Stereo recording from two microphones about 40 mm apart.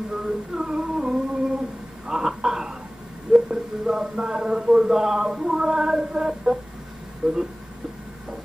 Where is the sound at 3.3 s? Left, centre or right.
Centre.